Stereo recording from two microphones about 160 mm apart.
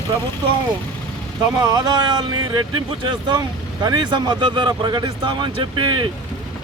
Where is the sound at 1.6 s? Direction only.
25° right (ahead or behind).